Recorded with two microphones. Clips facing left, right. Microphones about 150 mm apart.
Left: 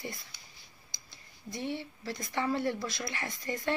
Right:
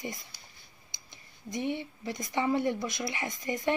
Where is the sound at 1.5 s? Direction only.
15° right (ahead or behind).